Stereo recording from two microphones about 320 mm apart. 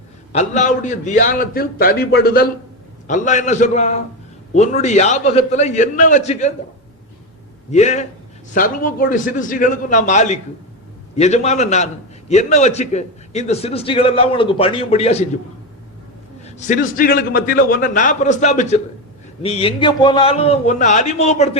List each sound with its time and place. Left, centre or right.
0.3 s a man's voice: left
7.7 s a man's voice: left
16.6 s a man's voice: left